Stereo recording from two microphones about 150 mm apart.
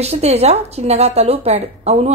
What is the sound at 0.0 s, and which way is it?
A woman's voice, 45° right (ahead or behind).